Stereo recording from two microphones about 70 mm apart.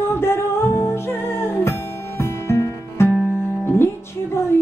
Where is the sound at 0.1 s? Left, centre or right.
Left.